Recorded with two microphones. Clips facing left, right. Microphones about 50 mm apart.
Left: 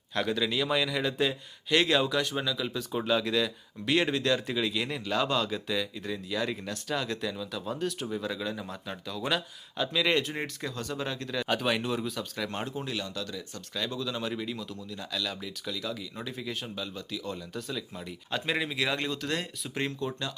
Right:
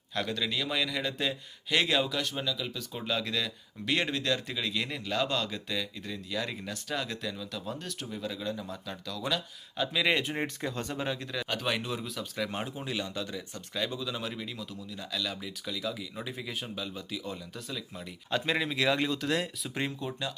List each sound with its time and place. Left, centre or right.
0.1 s speech: centre
8.9 s speech: centre
9.7 s speech: centre
10.4 s speech: right
11.0 s speech: centre
11.4 s speech: centre